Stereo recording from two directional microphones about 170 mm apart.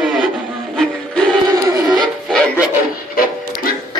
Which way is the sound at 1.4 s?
20° right (ahead or behind).